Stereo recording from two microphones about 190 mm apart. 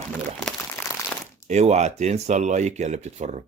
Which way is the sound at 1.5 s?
35° right (ahead or behind).